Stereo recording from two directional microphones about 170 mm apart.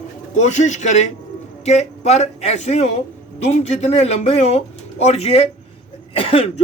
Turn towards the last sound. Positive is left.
turn(degrees=35)  # may be behind; listen again after turning